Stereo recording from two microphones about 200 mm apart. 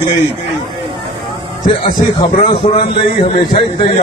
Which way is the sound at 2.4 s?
25° left (ahead or behind).